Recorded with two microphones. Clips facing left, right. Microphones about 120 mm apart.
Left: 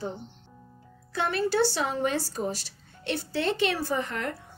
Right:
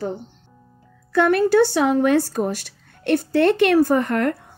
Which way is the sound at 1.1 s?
55° right (ahead or behind).